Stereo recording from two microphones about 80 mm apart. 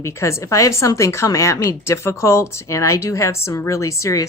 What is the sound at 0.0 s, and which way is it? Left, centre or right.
Speech, left.